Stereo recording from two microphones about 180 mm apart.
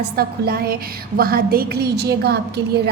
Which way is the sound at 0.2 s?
55° right (ahead or behind).